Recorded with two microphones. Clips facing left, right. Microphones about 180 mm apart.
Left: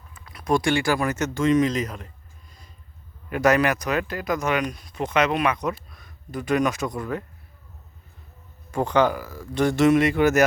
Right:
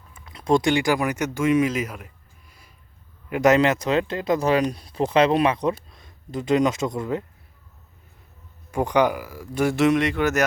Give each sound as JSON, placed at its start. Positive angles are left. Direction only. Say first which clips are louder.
{"t": 0.1, "sound": "speech", "louder": "right 3 dB", "side_deg": -25}
{"t": 3.2, "sound": "speech", "louder": "right 2 dB", "side_deg": -20}
{"t": 8.7, "sound": "speech", "louder": "even", "side_deg": -15}